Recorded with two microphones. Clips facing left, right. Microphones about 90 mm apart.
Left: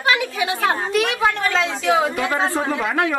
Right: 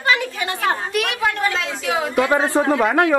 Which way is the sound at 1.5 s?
30° left (ahead or behind).